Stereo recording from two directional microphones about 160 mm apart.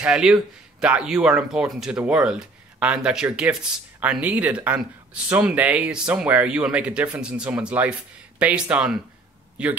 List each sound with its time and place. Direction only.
0.0 s speech: 5° right (ahead or behind)